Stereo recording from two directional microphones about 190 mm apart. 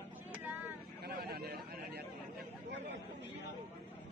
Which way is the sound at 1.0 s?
55° right (ahead or behind).